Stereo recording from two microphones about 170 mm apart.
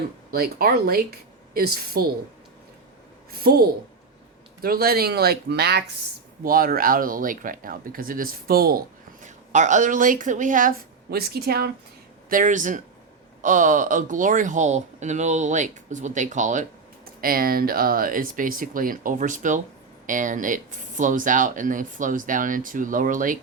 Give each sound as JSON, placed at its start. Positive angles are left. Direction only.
{"t": 0.3, "sound": "speech", "side_deg": -65}
{"t": 3.4, "sound": "speech", "side_deg": -65}
{"t": 6.4, "sound": "speech", "side_deg": -60}
{"t": 9.2, "sound": "speech", "side_deg": -45}
{"t": 12.3, "sound": "speech", "side_deg": -50}
{"t": 17.2, "sound": "speech", "side_deg": -60}